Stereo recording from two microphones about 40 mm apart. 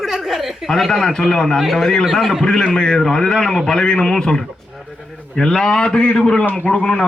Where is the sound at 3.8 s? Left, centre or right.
Left.